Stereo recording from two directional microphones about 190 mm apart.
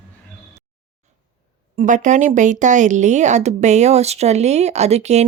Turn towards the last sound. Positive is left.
turn(degrees=-35)  # may be behind; listen again after turning